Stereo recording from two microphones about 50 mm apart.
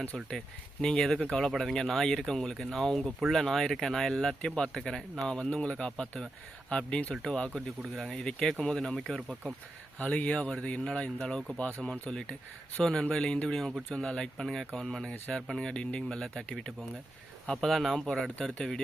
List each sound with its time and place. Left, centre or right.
0.0 s speech: centre
3.0 s speech: centre
10.1 s speech: left